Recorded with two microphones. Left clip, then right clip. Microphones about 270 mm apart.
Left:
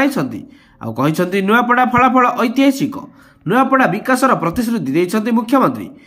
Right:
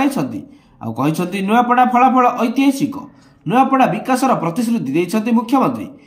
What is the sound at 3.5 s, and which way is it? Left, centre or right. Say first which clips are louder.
Speech: even; left.